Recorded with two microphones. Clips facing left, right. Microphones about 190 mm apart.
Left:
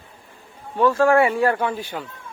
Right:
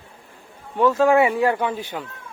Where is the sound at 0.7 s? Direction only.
20° right (ahead or behind).